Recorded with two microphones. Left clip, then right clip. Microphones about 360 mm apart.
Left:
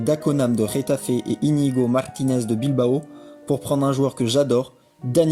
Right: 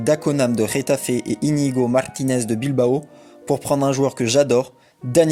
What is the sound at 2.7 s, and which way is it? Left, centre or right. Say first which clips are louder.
Speech: right 4 dB; right.